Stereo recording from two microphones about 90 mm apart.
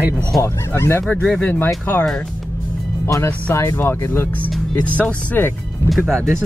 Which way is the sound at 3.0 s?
30° left (ahead or behind).